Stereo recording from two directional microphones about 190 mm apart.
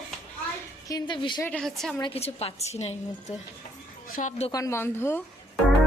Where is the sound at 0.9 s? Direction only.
25° left (ahead or behind).